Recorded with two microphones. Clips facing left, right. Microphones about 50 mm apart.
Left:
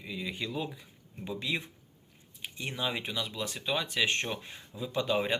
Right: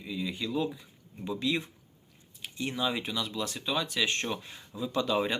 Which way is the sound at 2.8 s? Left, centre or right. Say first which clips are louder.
Right 2 dB; left.